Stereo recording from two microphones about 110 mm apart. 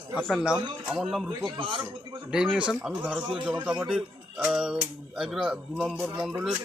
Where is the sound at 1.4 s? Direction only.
45° right (ahead or behind).